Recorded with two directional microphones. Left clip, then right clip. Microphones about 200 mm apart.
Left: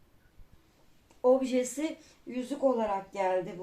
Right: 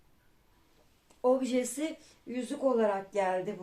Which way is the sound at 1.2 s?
30° right (ahead or behind).